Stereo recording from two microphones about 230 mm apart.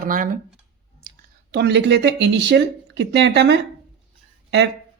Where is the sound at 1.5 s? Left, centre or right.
Right.